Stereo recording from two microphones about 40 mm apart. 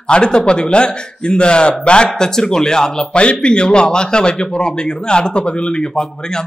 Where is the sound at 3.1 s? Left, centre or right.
Left.